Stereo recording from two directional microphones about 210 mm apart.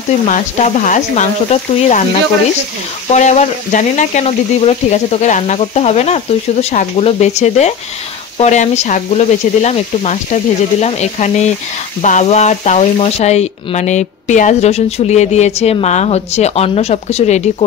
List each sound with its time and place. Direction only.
0.3 s speech: 35° left (ahead or behind)
3.1 s speech: 35° left (ahead or behind)